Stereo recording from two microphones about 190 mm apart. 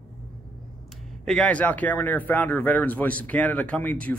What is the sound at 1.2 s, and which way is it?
Speech, 5° left (ahead or behind).